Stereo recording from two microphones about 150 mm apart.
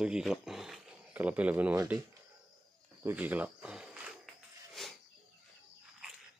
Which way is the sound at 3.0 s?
10° right (ahead or behind).